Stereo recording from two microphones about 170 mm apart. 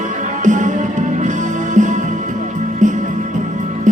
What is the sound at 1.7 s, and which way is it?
Music, 45° right (ahead or behind).